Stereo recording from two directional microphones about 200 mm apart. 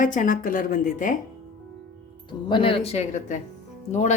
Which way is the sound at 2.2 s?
25° left (ahead or behind).